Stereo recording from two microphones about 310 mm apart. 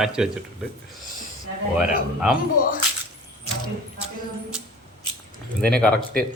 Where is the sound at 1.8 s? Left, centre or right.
Centre.